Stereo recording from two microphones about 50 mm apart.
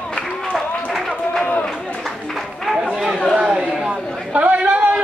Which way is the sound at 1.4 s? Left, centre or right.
Left.